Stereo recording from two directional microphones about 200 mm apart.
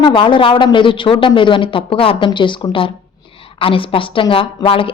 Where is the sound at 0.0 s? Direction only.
25° left (ahead or behind).